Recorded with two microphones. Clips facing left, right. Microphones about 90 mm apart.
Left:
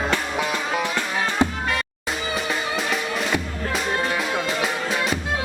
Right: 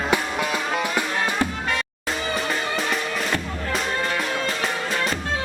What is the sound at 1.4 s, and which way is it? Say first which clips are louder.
Music: left 3 dB; 20° left (ahead or behind).